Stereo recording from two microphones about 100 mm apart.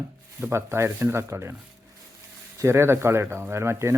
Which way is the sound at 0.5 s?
25° right (ahead or behind).